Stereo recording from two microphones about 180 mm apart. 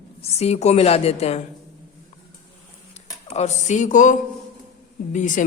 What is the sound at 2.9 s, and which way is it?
Speech, 40° left (ahead or behind).